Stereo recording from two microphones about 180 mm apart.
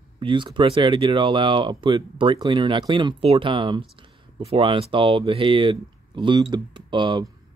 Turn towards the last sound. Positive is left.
turn(degrees=-25)  # may be behind; listen again after turning